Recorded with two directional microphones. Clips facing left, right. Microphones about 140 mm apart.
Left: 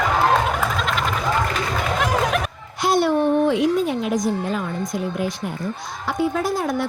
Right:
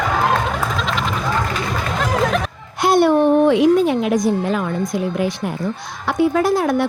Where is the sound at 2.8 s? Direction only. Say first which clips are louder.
Right 5 dB; 60° right (ahead or behind); by 4.6 s 75° right (ahead or behind).